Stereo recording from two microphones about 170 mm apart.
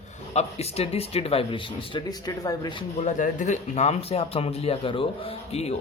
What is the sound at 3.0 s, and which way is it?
Speech, 45° left (ahead or behind).